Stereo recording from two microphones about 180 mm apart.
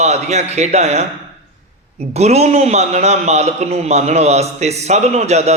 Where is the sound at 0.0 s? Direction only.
40° right (ahead or behind).